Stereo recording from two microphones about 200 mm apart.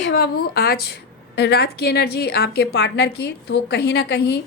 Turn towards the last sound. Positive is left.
turn(degrees=55)  # may be behind; listen again after turning